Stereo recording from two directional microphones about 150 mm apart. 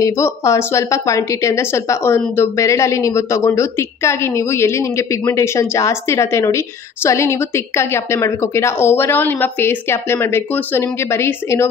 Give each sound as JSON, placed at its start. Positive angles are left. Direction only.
{"t": 0.0, "sound": "speech", "side_deg": 20}